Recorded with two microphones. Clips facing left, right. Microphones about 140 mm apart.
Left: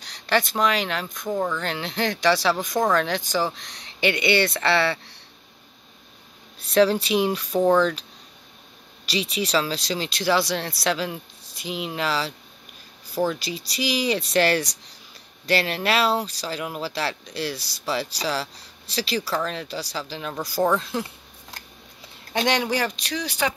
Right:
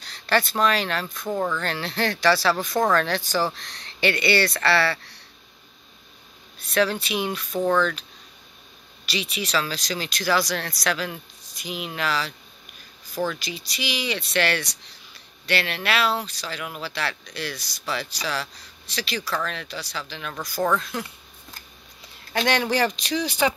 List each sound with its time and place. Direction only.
0.0 s speech: 15° left (ahead or behind)
6.7 s speech: 30° left (ahead or behind)
9.0 s speech: 35° left (ahead or behind)
22.3 s speech: 20° left (ahead or behind)
22.8 s speech: centre (ahead or behind)